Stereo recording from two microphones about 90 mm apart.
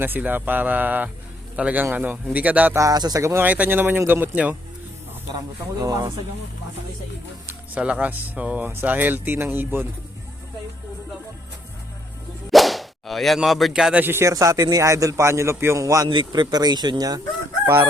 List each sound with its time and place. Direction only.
0.0 s a man's voice: 20° right (ahead or behind)
2.7 s a man's voice: 40° right (ahead or behind)
3.4 s speech: 20° right (ahead or behind)
5.7 s speech: 45° right (ahead or behind)
7.8 s speech: 15° right (ahead or behind)
12.5 s whip: centre (ahead or behind)
13.9 s speech: 25° right (ahead or behind)
14.3 s a man's voice: 35° right (ahead or behind)
16.0 s speech: 60° right (ahead or behind)